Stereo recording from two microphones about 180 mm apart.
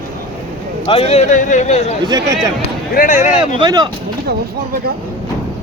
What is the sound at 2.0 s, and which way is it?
Speech, 20° right (ahead or behind).